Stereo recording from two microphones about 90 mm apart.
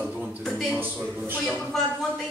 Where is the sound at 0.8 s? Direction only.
20° right (ahead or behind).